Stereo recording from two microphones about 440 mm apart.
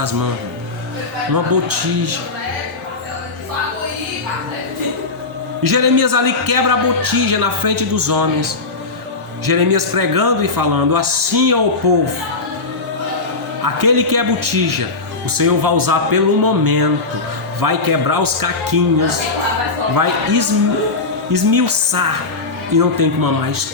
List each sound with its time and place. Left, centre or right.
1.3 s a man's voice: right
5.6 s a man's voice: right
9.5 s a man's voice: right
13.7 s a man's voice: right